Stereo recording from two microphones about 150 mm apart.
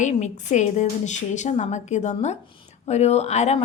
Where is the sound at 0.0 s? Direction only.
50° left (ahead or behind).